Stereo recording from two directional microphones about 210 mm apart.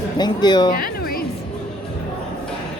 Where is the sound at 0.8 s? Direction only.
45° left (ahead or behind).